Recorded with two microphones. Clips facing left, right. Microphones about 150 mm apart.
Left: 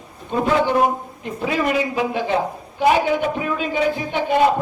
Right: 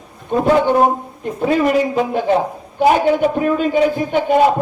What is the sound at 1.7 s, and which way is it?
A man's voice, 45° right (ahead or behind).